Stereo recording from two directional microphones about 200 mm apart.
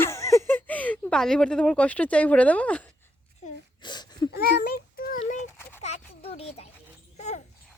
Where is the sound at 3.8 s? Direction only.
20° left (ahead or behind).